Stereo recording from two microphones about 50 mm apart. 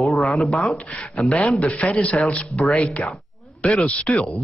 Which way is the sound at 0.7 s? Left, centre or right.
Left.